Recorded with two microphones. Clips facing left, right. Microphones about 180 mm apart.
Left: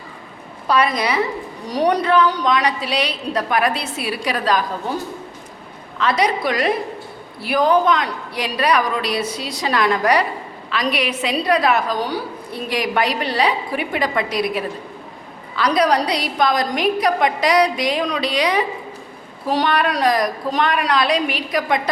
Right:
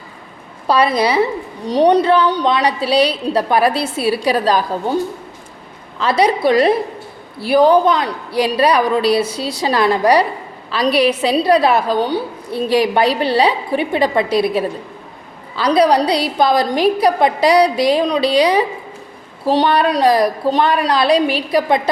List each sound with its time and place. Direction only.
0.7 s a woman's voice: 30° right (ahead or behind)
6.0 s a woman's voice: 30° right (ahead or behind)